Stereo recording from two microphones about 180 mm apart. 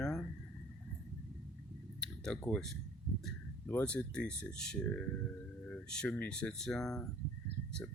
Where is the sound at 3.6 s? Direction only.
10° left (ahead or behind).